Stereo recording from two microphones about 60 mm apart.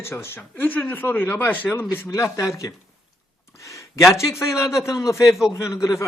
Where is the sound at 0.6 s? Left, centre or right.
Left.